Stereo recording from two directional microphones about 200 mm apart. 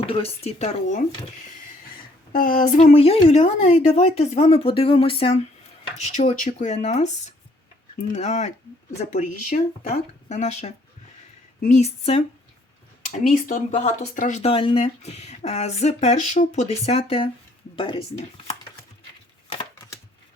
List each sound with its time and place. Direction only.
0.0 s speech: 30° left (ahead or behind)
2.3 s speech: 45° left (ahead or behind)
13.2 s speech: 40° left (ahead or behind)